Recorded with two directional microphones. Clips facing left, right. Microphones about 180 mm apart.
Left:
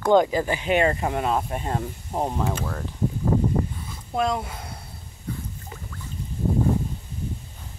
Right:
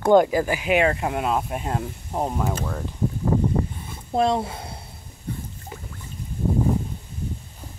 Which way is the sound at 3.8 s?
30° right (ahead or behind).